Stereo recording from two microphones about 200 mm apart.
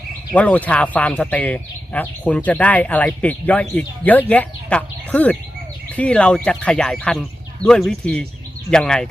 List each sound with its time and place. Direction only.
0.3 s speech: 5° left (ahead or behind)